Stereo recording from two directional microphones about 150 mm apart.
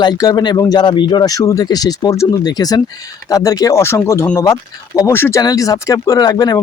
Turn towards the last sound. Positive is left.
turn(degrees=25)  # may be behind; listen again after turning